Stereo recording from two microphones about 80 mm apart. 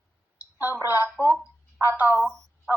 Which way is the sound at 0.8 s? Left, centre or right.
Left.